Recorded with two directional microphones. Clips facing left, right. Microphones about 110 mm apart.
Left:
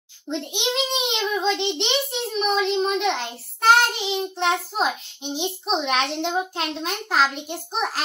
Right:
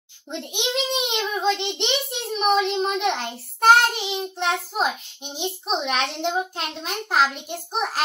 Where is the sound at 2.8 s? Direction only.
Centre (ahead or behind).